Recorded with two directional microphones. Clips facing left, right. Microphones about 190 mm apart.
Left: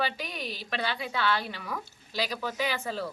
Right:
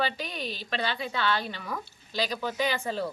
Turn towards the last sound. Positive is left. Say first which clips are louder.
# right 2 dB
turn(degrees=0)  # may be behind; listen again after turning